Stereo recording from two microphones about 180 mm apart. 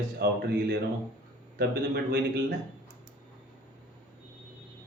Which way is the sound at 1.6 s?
65° right (ahead or behind).